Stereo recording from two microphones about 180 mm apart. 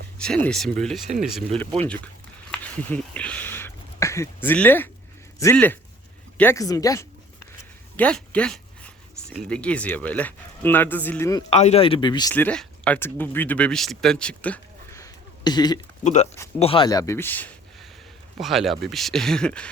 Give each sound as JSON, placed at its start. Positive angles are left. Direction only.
{"t": 0.2, "sound": "speech", "side_deg": 5}
{"t": 2.5, "sound": "a sound", "side_deg": 5}
{"t": 5.4, "sound": "a man's voice", "side_deg": 10}
{"t": 7.9, "sound": "a sound", "side_deg": 5}
{"t": 9.5, "sound": "a man's voice", "side_deg": 5}
{"t": 11.5, "sound": "speech", "side_deg": 35}
{"t": 12.3, "sound": "speech", "side_deg": 10}
{"t": 15.0, "sound": "a sound", "side_deg": 25}
{"t": 16.6, "sound": "speech", "side_deg": 30}
{"t": 18.3, "sound": "speech", "side_deg": 0}